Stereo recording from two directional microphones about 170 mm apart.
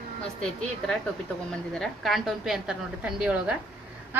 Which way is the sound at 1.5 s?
5° left (ahead or behind).